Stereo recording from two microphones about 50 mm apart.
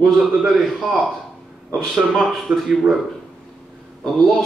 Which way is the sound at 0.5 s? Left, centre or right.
Centre.